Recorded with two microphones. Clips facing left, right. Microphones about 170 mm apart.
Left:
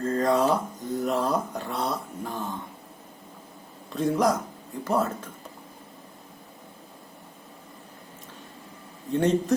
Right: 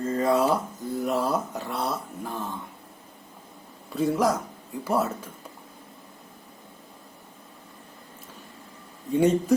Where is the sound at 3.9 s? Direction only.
5° right (ahead or behind).